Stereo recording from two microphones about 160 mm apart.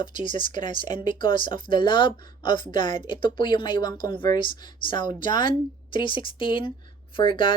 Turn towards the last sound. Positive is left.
turn(degrees=30)  # may be behind; listen again after turning